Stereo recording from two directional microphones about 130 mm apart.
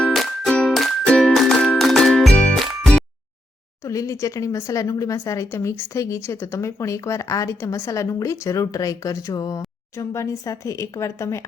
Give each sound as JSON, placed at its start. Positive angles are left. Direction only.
{"t": 0.0, "sound": "music", "side_deg": 5}
{"t": 2.3, "sound": "jingle", "side_deg": 10}
{"t": 3.8, "sound": "a woman's voice", "side_deg": 25}